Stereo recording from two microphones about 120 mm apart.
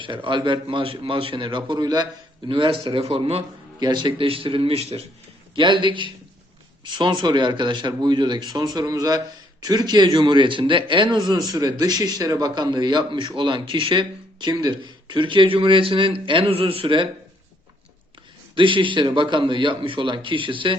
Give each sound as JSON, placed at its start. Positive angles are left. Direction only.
{"t": 0.0, "sound": "a man's voice", "side_deg": -45}
{"t": 3.8, "sound": "a man's voice", "side_deg": -35}
{"t": 5.5, "sound": "a man's voice", "side_deg": -40}
{"t": 18.5, "sound": "a man's voice", "side_deg": -45}